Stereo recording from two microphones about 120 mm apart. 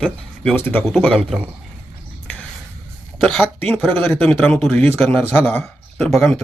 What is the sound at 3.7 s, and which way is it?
Speech, 5° left (ahead or behind).